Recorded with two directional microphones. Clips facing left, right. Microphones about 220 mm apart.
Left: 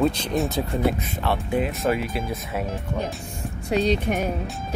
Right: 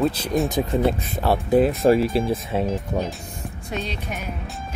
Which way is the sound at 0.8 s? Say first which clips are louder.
Right 2 dB; 30° right (ahead or behind).